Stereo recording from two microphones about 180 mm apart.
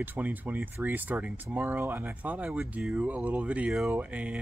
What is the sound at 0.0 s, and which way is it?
Speech, 10° right (ahead or behind).